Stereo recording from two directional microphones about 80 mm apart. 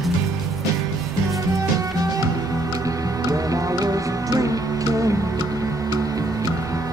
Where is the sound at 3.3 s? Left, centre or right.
Right.